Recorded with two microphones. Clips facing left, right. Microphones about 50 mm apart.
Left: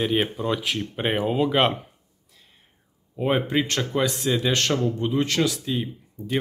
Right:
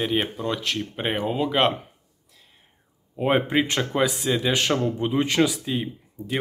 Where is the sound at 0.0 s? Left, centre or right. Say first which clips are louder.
Left 1 dB; centre.